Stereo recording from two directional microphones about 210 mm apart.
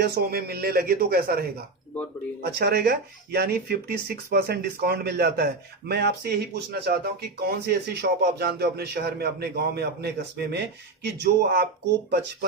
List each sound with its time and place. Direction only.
0.0 s speech: 50° right (ahead or behind)